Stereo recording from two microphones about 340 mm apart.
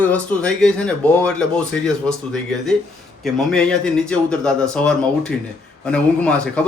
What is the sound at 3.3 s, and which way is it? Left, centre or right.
Speech, centre.